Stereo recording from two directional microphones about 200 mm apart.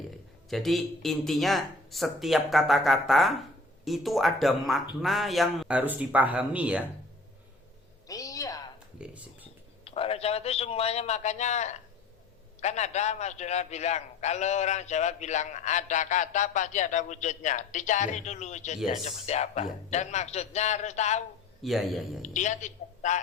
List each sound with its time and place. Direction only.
0.5 s speech: centre (ahead or behind)
8.0 s a sound: 15° left (ahead or behind)
9.0 s a sound: 5° right (ahead or behind)
9.8 s a man's voice: 30° left (ahead or behind)
21.6 s speech: centre (ahead or behind)
22.2 s a man's voice: 35° left (ahead or behind)